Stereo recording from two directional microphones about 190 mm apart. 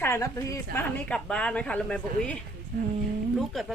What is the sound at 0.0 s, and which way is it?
A woman's voice, 15° left (ahead or behind).